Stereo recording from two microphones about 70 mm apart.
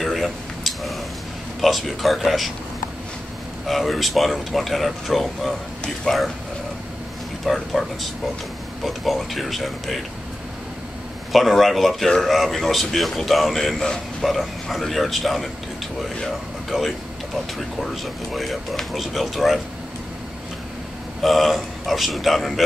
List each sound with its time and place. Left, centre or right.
0.0 s a sound: centre
1.6 s a man's voice: centre
3.6 s a man's voice: centre
7.4 s a man's voice: centre
11.3 s a man's voice: centre
21.2 s a man's voice: centre